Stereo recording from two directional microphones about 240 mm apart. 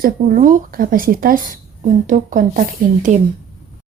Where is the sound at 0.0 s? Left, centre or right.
Right.